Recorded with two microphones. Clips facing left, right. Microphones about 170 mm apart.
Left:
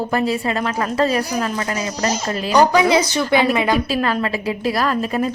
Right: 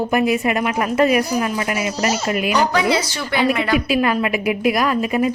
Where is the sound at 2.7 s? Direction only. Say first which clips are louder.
Left 4 dB; 15° left (ahead or behind).